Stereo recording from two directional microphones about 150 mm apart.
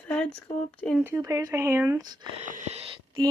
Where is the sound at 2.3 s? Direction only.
55° right (ahead or behind).